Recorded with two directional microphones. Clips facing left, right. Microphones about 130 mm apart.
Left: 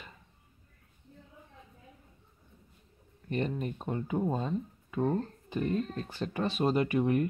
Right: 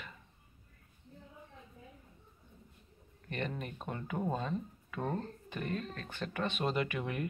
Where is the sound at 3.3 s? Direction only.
35° left (ahead or behind).